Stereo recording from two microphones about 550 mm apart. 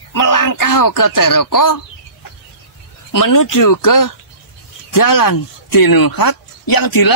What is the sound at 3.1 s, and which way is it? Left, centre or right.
Speech, left.